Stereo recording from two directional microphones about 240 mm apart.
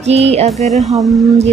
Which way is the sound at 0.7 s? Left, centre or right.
Centre.